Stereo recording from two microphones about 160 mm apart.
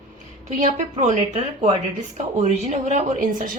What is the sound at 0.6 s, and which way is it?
A woman's voice, 45° right (ahead or behind).